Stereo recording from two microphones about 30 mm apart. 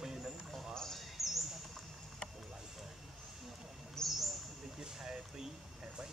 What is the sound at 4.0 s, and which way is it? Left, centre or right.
Bird, centre.